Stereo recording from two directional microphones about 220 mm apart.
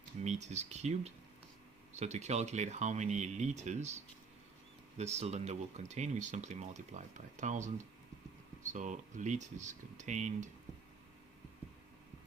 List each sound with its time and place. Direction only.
0.3 s speech: 30° right (ahead or behind)
8.7 s speech: 35° right (ahead or behind)